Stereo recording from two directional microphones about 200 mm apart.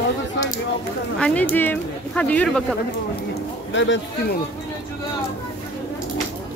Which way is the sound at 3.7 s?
70° left (ahead or behind).